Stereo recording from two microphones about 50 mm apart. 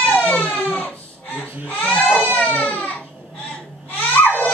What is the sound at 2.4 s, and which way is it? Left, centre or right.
Baby cry, left.